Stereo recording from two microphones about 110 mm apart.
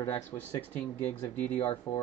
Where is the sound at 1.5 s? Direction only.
55° left (ahead or behind).